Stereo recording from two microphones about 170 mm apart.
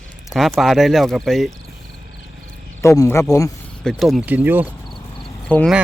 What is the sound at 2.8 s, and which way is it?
Speech, 15° left (ahead or behind).